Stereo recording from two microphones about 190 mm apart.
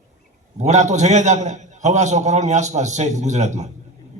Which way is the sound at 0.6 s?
40° right (ahead or behind).